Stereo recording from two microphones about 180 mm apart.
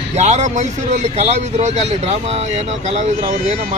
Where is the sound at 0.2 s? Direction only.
40° right (ahead or behind).